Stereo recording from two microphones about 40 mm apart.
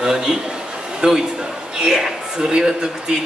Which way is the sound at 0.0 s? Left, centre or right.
Centre.